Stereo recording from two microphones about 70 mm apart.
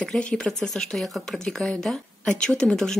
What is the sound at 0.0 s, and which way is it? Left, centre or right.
Speech, centre.